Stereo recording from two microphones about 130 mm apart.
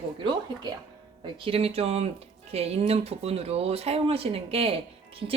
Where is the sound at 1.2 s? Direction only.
45° right (ahead or behind).